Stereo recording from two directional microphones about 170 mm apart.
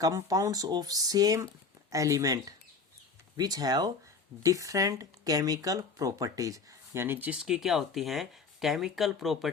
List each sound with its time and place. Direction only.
0.0 s speech: 20° right (ahead or behind); by 9.5 s centre (ahead or behind)